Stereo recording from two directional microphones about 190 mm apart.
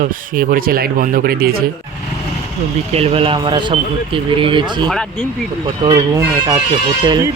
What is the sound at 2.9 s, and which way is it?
Speech, 30° right (ahead or behind).